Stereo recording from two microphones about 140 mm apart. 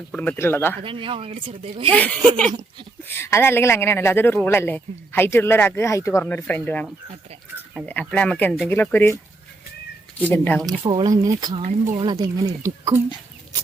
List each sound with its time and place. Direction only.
0.1 s speech: 10° left (ahead or behind)
0.8 s speech: 40° right (ahead or behind)
2.0 s speech: 10° left (ahead or behind)
7.9 s speech: 10° left (ahead or behind)
10.3 s speech: 10° left (ahead or behind)
10.7 s speech: 30° right (ahead or behind)